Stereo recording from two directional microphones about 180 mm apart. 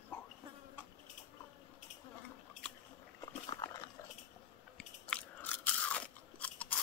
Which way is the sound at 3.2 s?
25° left (ahead or behind).